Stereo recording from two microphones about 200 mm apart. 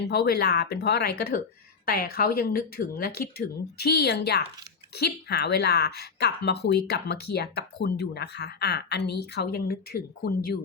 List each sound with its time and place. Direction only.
0.0 s speech: 55° left (ahead or behind)